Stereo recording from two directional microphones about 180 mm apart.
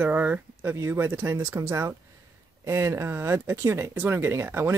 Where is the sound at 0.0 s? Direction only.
10° right (ahead or behind).